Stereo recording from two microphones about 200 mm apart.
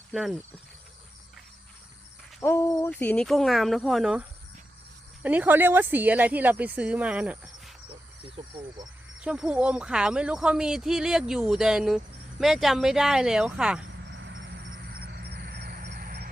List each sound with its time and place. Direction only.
0.1 s speech: centre (ahead or behind)
2.4 s speech: 15° left (ahead or behind); by 7.7 s 5° right (ahead or behind)
9.2 s speech: 5° right (ahead or behind)
14.1 s vehicle: 70° right (ahead or behind)
14.9 s vehicle: 50° right (ahead or behind)